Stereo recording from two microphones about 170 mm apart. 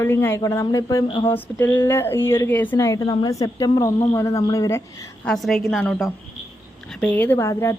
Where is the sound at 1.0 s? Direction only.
35° left (ahead or behind).